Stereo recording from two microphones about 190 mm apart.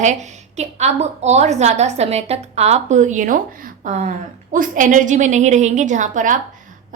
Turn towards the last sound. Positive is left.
turn(degrees=-40)  # may be behind; listen again after turning